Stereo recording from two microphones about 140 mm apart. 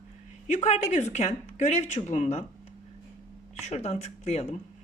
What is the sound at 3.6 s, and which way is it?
Speech, 50° left (ahead or behind).